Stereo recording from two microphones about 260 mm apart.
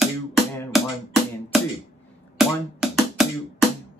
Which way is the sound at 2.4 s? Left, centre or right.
Centre.